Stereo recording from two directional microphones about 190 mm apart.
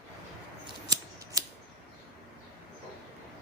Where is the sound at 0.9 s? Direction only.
20° right (ahead or behind).